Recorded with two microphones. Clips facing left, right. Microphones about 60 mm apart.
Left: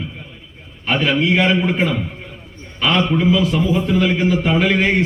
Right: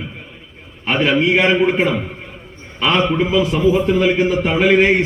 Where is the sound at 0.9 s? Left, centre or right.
Right.